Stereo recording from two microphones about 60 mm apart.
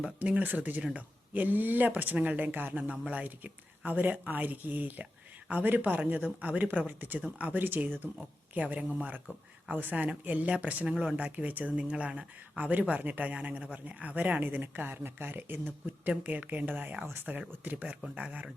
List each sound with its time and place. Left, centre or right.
0.2 s speech: right